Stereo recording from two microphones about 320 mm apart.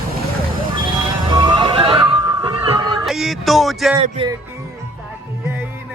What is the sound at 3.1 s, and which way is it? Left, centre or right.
Speech, centre.